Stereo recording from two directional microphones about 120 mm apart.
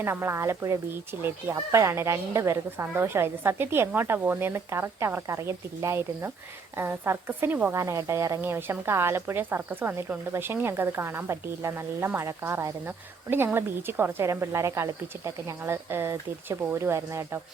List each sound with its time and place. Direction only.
0.0 s a woman's voice: 20° right (ahead or behind)